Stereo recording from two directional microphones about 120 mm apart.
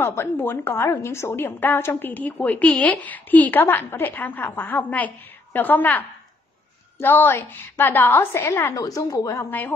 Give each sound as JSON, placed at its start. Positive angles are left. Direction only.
{"t": 0.0, "sound": "a woman's voice", "side_deg": 20}
{"t": 9.5, "sound": "a woman's voice", "side_deg": 15}